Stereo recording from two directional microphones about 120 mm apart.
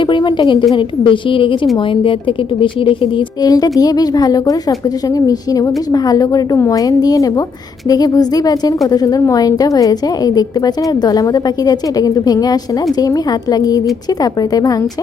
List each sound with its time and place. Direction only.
0.0 s a woman's voice: 40° left (ahead or behind)
3.4 s a woman's voice: 35° left (ahead or behind)